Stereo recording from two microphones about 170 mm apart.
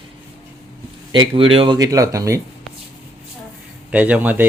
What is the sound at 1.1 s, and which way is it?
Speech, 30° right (ahead or behind).